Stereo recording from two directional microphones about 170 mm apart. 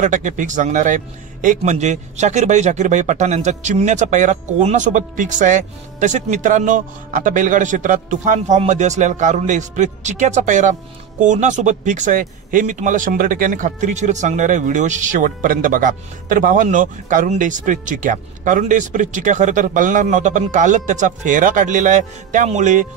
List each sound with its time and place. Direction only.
0.0 s speech: 45° right (ahead or behind)